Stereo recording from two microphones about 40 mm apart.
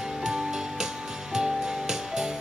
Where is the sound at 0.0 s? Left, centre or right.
Centre.